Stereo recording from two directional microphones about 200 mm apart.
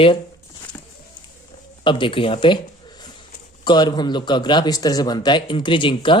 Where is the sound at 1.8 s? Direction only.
25° left (ahead or behind).